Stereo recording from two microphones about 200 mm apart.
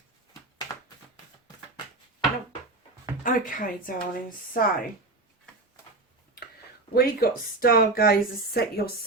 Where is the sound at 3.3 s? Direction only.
45° left (ahead or behind).